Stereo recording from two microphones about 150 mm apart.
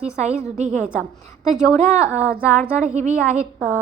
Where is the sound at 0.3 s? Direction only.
55° right (ahead or behind).